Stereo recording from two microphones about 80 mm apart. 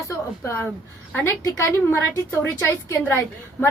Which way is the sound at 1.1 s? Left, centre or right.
Left.